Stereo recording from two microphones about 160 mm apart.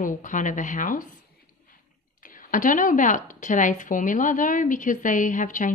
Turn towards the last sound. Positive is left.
turn(degrees=55)  # may be behind; listen again after turning